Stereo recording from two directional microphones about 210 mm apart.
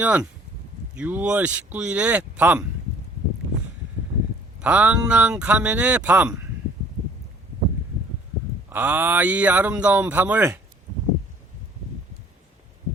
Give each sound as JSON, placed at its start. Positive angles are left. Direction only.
{"t": 0.0, "sound": "speech", "side_deg": -5}
{"t": 4.6, "sound": "speech", "side_deg": -5}
{"t": 8.7, "sound": "speech", "side_deg": -10}